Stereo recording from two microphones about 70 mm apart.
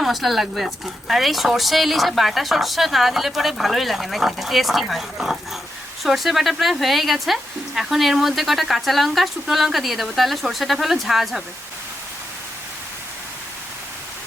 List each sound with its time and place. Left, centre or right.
0.0 s speech: centre